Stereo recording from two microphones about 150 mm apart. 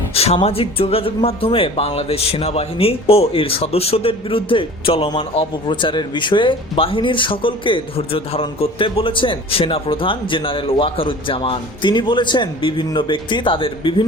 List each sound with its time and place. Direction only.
0.1 s speech: 40° left (ahead or behind)